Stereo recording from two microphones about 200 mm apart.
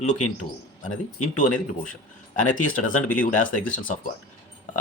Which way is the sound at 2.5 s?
40° left (ahead or behind).